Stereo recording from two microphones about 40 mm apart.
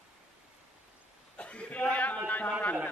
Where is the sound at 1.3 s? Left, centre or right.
Left.